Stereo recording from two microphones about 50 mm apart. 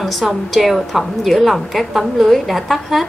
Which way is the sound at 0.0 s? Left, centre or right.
Centre.